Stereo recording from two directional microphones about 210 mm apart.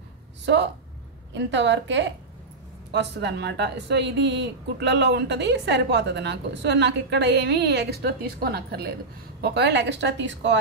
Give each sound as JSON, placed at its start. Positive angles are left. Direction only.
{"t": 1.3, "sound": "a woman's voice", "side_deg": -60}